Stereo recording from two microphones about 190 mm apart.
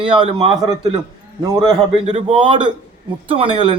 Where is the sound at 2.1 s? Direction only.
30° right (ahead or behind).